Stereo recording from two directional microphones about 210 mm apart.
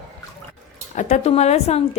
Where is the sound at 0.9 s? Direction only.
35° left (ahead or behind).